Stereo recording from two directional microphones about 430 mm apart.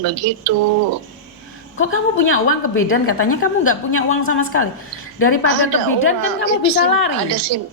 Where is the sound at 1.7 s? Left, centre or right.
Left.